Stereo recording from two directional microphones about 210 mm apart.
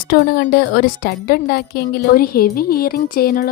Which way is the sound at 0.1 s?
45° left (ahead or behind).